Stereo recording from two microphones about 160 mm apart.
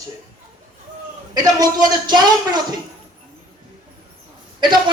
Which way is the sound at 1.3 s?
25° right (ahead or behind).